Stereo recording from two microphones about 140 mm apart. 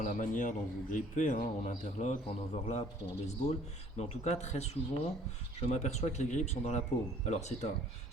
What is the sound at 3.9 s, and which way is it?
A man's voice, 50° left (ahead or behind).